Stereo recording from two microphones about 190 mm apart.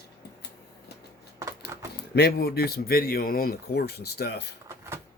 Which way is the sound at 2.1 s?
55° left (ahead or behind).